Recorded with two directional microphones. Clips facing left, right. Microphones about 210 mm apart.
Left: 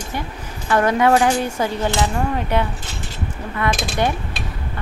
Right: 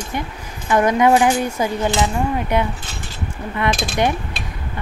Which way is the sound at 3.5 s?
20° right (ahead or behind).